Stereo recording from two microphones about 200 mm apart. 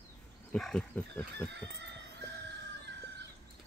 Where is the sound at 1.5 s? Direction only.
60° right (ahead or behind).